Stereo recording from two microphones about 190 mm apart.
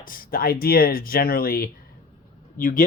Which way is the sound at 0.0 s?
50° left (ahead or behind).